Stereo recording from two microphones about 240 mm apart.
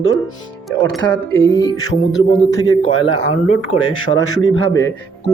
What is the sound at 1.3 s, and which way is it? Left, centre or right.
Speech, centre.